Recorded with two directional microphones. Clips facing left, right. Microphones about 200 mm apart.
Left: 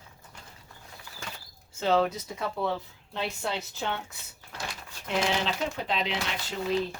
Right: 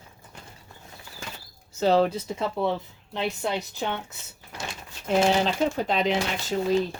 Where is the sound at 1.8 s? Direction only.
35° right (ahead or behind); by 3.9 s 20° right (ahead or behind).